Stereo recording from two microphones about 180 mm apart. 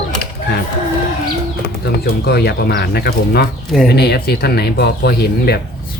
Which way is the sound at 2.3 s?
60° left (ahead or behind).